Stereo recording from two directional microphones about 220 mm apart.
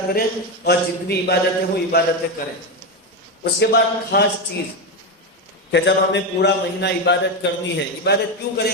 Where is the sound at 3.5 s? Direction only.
50° left (ahead or behind).